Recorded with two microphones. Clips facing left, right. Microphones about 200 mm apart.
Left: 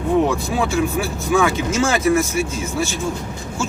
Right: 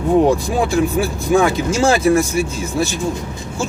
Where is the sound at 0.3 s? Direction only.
35° right (ahead or behind).